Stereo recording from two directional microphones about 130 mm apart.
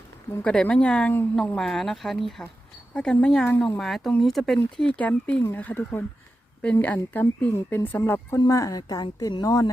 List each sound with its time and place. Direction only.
0.4 s speech: 10° left (ahead or behind)
3.5 s a woman's voice: 20° left (ahead or behind)
3.8 s a woman's voice: centre (ahead or behind); by 9.7 s 30° left (ahead or behind)